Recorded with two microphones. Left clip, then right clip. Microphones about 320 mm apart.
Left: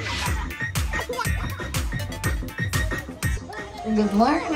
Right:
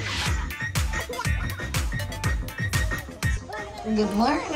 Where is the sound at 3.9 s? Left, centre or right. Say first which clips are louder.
Left 3 dB; centre.